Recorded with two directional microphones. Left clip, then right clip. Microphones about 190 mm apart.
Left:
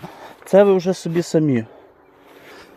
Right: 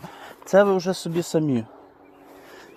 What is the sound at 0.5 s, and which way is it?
Speech, 40° left (ahead or behind).